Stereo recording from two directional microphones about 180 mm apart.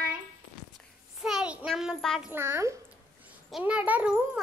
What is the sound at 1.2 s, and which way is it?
A child's voice, 5° right (ahead or behind).